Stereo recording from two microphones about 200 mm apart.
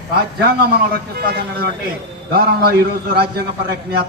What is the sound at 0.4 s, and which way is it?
A man's voice, 50° right (ahead or behind).